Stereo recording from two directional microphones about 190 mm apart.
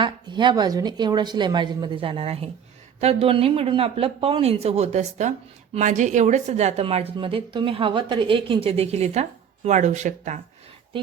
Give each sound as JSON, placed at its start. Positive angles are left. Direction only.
{"t": 0.0, "sound": "a woman's voice", "side_deg": -25}